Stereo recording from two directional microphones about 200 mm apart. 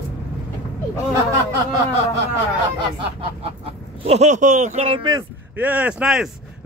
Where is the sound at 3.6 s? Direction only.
30° right (ahead or behind).